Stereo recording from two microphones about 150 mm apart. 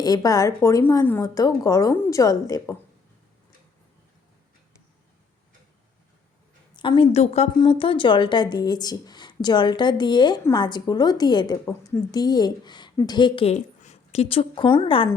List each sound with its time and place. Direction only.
0.0 s a woman's voice: 25° left (ahead or behind)
6.7 s a woman's voice: 35° left (ahead or behind)